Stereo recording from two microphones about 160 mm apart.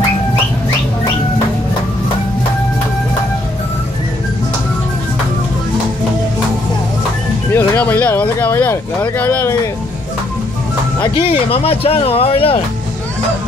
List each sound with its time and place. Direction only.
7.5 s speech: 10° left (ahead or behind)
11.0 s speech: 35° left (ahead or behind)